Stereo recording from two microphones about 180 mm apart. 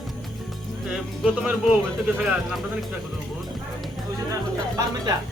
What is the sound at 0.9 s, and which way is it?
Speech, 5° right (ahead or behind).